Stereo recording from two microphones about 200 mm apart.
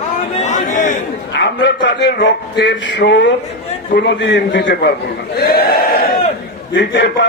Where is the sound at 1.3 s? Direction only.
60° left (ahead or behind).